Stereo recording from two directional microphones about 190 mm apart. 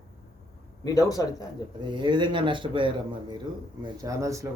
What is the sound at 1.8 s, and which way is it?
A man's voice, 25° right (ahead or behind).